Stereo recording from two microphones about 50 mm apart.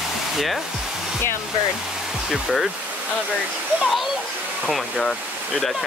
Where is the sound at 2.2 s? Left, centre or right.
Centre.